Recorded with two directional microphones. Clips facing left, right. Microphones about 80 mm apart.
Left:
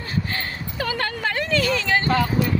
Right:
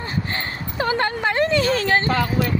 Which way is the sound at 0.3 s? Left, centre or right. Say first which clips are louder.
Right 1 dB; right.